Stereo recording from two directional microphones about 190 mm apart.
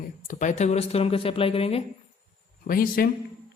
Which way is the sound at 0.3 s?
40° left (ahead or behind).